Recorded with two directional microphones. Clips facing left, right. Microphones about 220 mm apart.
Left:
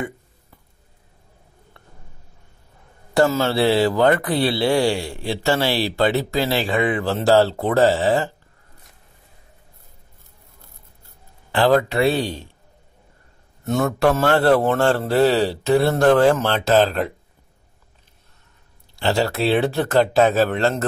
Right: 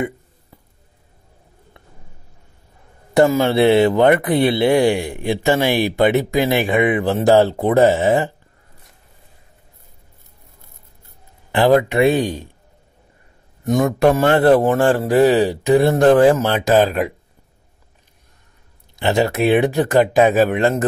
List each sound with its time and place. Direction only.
3.2 s speech: 15° right (ahead or behind)
11.5 s a man's voice: 20° right (ahead or behind)
13.7 s a man's voice: 15° right (ahead or behind)
18.9 s a man's voice: 20° right (ahead or behind)